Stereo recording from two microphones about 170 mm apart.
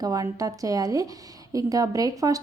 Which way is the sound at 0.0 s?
20° right (ahead or behind).